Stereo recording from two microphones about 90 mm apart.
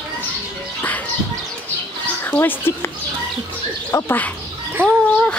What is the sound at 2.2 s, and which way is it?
Speech, 20° left (ahead or behind).